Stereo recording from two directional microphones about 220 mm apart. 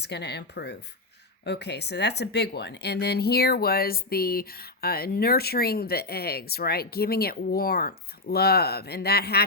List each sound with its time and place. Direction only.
0.0 s a woman's voice: 50° left (ahead or behind)